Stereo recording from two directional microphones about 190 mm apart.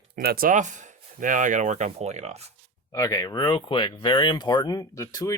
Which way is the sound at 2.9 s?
20° left (ahead or behind).